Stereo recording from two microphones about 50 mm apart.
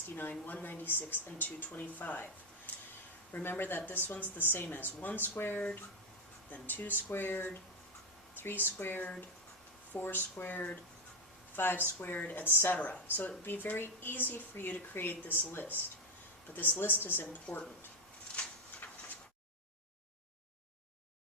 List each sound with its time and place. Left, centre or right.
0.2 s speech: left
3.3 s speech: left
5.4 s speech: left
12.5 s speech: left
12.7 s speech: left